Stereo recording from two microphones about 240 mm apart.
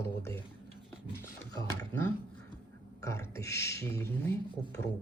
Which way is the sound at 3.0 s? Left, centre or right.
Centre.